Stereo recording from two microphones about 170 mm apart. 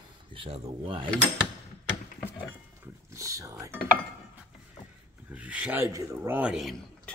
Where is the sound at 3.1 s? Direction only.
20° right (ahead or behind).